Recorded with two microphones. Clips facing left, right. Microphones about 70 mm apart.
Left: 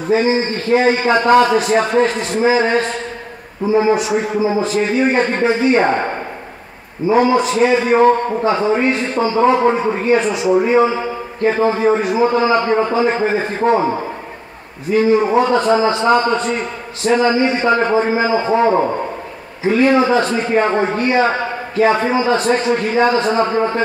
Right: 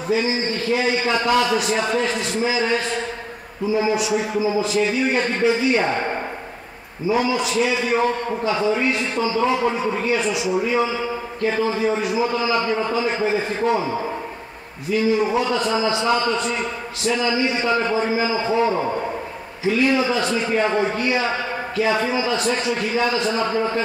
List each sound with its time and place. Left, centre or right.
0.1 s a man's voice: left
7.1 s a man's voice: left